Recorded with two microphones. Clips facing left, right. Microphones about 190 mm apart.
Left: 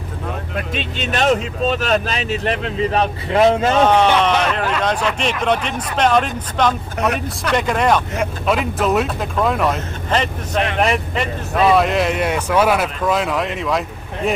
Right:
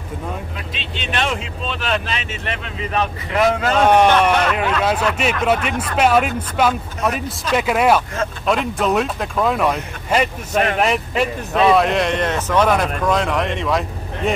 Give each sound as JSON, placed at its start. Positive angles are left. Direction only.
{"t": 0.6, "sound": "speech", "side_deg": 45}
{"t": 3.8, "sound": "speech", "side_deg": -10}